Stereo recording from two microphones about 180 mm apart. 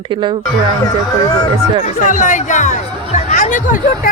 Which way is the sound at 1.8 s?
45° left (ahead or behind).